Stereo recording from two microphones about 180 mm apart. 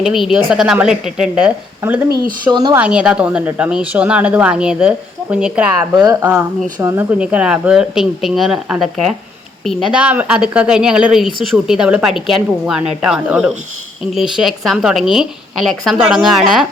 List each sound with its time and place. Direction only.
0.0 s speech: centre (ahead or behind)
2.5 s speech: 25° right (ahead or behind)
2.7 s speech: 5° right (ahead or behind)